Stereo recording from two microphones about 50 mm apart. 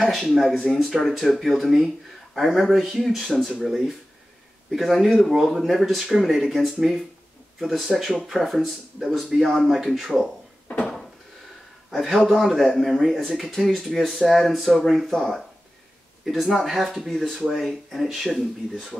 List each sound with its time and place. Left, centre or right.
0.0 s speech: centre
11.9 s speech: centre